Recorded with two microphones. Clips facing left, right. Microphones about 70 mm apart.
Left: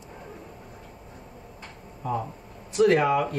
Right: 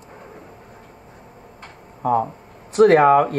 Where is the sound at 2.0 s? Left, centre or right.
Right.